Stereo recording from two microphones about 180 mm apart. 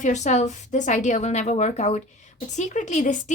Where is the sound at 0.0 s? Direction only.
40° left (ahead or behind).